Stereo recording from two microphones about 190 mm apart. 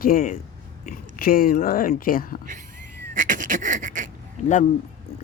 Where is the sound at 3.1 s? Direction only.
45° right (ahead or behind).